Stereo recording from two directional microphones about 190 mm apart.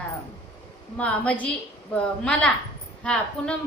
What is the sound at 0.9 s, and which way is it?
A woman's voice, 5° left (ahead or behind).